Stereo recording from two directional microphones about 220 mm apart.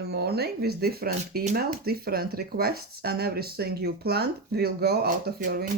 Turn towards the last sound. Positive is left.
turn(degrees=-45)  # may be behind; listen again after turning